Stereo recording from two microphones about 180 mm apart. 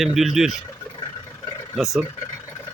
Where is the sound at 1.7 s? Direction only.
Centre (ahead or behind).